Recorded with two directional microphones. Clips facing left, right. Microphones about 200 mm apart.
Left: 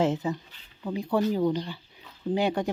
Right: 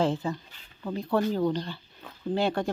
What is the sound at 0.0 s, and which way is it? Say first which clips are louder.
Speech: left 1 dB; 20° left (ahead or behind).